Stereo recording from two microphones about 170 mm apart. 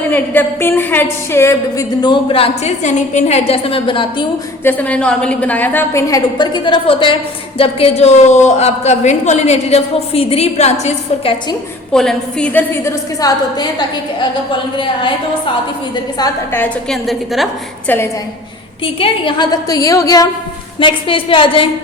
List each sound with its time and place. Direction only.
0.1 s a woman's voice: 10° left (ahead or behind)
2.0 s a woman's voice: 30° left (ahead or behind)
4.6 s a woman's voice: 10° left (ahead or behind); by 11.3 s 40° left (ahead or behind)
11.9 s a woman's voice: 5° left (ahead or behind)
12.8 s a woman's voice: 25° left (ahead or behind)
16.1 s a woman's voice: 20° left (ahead or behind)
16.6 s a woman's voice: 5° left (ahead or behind)
17.8 s a woman's voice: 10° left (ahead or behind)
18.9 s a woman's voice: 30° left (ahead or behind)
20.7 s a woman's voice: 30° left (ahead or behind)